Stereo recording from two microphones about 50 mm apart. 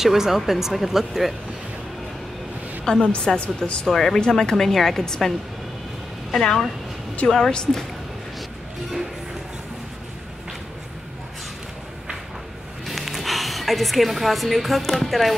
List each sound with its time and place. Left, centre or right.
0.0 s speech: centre
2.8 s a woman's voice: centre
3.8 s a woman's voice: centre
7.2 s a woman's voice: centre
12.8 s speech: centre